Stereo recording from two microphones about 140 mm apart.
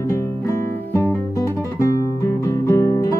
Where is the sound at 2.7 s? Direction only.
20° left (ahead or behind).